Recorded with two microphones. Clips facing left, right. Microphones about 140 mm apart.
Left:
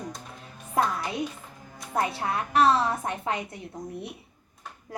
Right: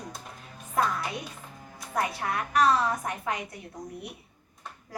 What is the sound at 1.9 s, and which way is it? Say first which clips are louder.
A woman's voice: left 2 dB; 25° left (ahead or behind).